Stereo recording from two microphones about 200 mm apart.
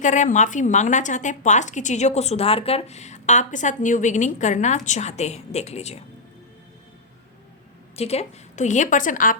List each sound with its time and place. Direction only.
0.0 s speech: 35° left (ahead or behind)
7.9 s speech: 30° left (ahead or behind)